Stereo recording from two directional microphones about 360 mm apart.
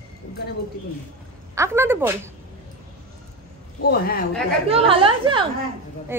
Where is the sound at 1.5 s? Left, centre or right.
Centre.